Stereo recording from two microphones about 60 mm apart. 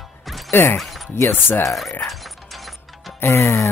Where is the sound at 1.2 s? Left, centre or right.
Left.